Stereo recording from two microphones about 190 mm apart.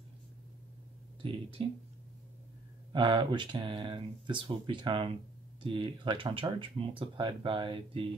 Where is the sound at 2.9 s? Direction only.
25° right (ahead or behind).